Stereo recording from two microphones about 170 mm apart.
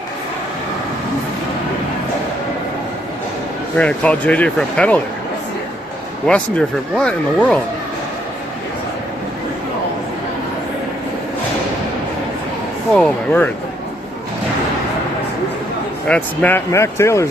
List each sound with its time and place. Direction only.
3.8 s speech: 10° left (ahead or behind)
6.2 s speech: 5° left (ahead or behind)
13.0 s speech: 5° left (ahead or behind)
16.0 s speech: 5° left (ahead or behind)